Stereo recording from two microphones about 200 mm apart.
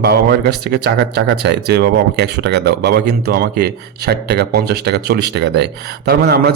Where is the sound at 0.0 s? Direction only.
50° right (ahead or behind).